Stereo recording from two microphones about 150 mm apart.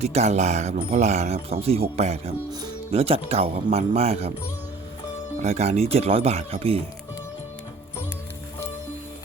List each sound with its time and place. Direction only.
0.0 s speech: 45° right (ahead or behind)
5.4 s speech: 45° right (ahead or behind)